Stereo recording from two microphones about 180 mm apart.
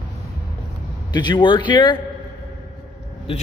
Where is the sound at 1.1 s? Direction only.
25° left (ahead or behind).